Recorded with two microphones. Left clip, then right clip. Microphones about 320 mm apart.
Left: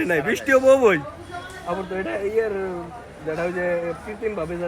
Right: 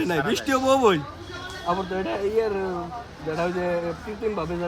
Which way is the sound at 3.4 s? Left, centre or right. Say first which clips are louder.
Left 1 dB; centre.